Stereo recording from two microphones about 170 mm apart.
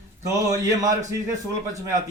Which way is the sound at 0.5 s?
20° right (ahead or behind).